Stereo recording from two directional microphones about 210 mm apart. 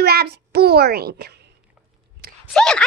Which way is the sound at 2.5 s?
5° left (ahead or behind).